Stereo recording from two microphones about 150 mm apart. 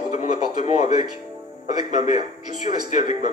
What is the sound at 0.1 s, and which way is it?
Speech, 50° left (ahead or behind).